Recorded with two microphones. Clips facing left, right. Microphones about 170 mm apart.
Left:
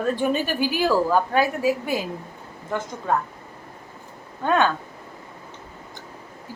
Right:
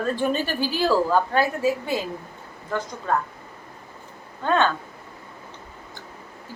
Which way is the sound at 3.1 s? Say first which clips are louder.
Left 1 dB; 15° left (ahead or behind).